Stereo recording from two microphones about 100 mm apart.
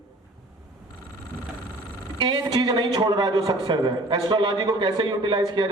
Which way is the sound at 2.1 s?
50° right (ahead or behind).